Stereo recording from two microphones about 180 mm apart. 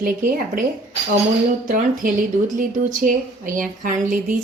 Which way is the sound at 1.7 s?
50° right (ahead or behind).